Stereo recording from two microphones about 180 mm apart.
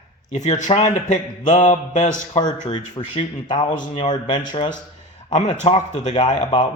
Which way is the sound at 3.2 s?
25° left (ahead or behind).